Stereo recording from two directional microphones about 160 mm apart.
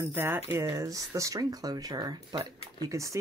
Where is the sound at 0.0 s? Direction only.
15° right (ahead or behind).